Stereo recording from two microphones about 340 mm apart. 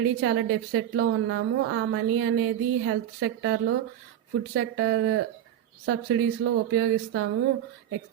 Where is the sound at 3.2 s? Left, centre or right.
Right.